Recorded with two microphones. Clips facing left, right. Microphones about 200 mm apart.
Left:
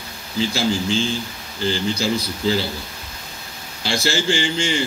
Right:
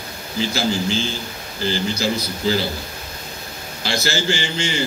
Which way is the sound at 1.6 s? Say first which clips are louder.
Even; 30° left (ahead or behind).